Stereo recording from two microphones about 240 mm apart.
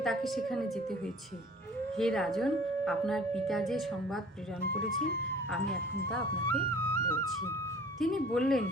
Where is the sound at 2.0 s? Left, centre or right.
Centre.